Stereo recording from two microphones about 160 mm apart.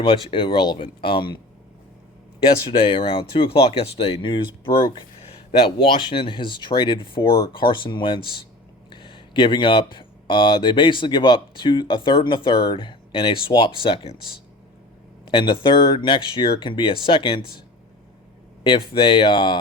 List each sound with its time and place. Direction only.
0.0 s speech: 30° left (ahead or behind)
2.6 s speech: 30° left (ahead or behind)
15.3 s speech: 30° left (ahead or behind)
18.9 s speech: 30° left (ahead or behind)